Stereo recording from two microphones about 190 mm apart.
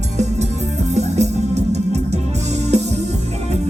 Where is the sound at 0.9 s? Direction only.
35° right (ahead or behind).